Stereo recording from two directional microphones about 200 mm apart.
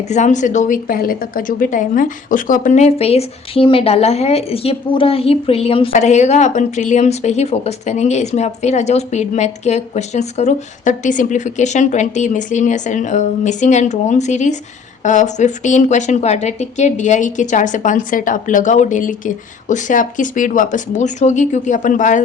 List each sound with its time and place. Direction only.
0.1 s a woman's voice: 35° left (ahead or behind)